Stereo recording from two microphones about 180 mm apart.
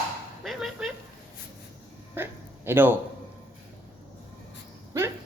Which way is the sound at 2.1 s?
10° right (ahead or behind).